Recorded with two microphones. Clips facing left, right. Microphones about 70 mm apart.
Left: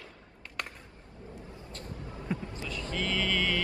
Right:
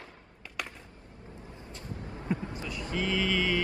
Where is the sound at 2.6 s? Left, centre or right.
Centre.